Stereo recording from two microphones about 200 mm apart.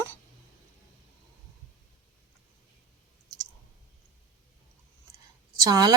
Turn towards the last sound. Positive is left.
turn(degrees=-20)  # may be behind; listen again after turning